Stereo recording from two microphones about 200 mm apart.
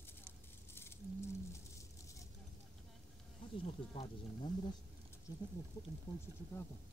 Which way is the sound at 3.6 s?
30° left (ahead or behind).